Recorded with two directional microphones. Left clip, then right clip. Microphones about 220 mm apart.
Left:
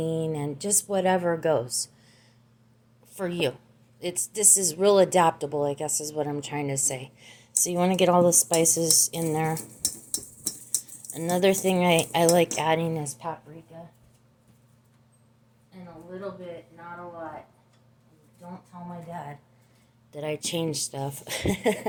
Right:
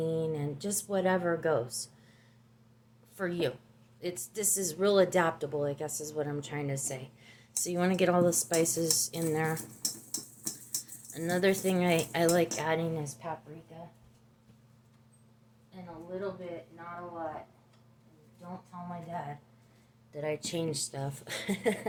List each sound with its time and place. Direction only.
0.0 s a woman's voice: 30° left (ahead or behind)
3.2 s a woman's voice: 25° left (ahead or behind)
11.1 s a woman's voice: 20° left (ahead or behind)
20.1 s a woman's voice: 35° left (ahead or behind)